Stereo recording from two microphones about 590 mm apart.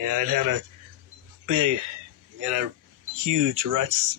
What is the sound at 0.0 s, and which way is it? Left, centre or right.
Speech, right.